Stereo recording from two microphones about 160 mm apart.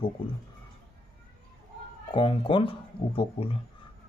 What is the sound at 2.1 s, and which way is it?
Speech, 30° left (ahead or behind).